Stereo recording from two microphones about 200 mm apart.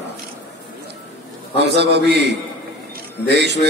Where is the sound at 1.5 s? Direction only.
55° right (ahead or behind).